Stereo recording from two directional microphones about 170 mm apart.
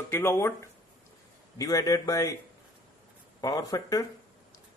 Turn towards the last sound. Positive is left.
turn(degrees=20)  # may be behind; listen again after turning